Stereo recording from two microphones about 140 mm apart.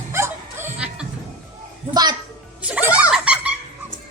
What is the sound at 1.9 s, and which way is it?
Music, 30° right (ahead or behind).